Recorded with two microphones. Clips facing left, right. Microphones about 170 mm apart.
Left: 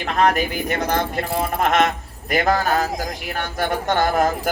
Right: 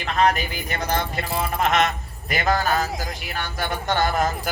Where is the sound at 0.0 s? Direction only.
50° left (ahead or behind).